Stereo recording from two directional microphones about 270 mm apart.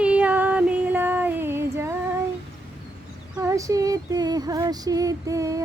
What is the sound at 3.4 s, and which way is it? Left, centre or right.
Female singing, centre.